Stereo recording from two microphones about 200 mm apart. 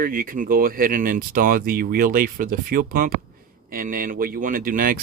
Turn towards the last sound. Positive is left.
turn(degrees=-45)  # may be behind; listen again after turning